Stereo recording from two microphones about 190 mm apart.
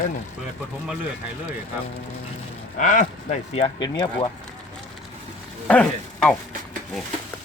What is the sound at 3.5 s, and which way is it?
Speech, 25° left (ahead or behind).